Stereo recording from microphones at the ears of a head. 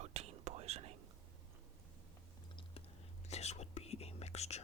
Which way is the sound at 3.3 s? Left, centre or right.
Left.